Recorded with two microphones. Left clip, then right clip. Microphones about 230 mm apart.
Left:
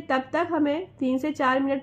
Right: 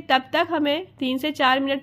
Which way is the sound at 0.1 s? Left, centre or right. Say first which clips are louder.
Right 4 dB; right.